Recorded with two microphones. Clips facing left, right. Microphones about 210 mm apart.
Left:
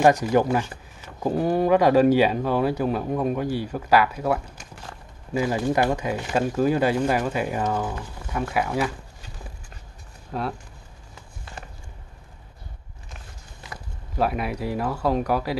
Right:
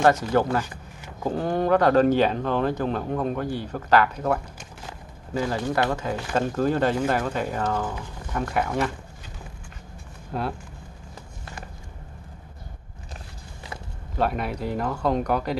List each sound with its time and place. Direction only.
0.0 s speech: 15° left (ahead or behind)
10.3 s speech: centre (ahead or behind)
14.1 s speech: 5° left (ahead or behind)